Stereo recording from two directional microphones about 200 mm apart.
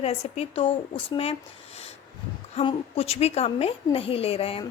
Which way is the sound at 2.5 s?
25° left (ahead or behind).